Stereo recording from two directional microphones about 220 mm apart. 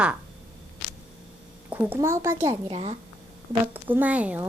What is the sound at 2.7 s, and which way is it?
Speech, 25° right (ahead or behind).